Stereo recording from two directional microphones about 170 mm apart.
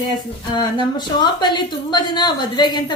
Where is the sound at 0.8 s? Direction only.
25° left (ahead or behind).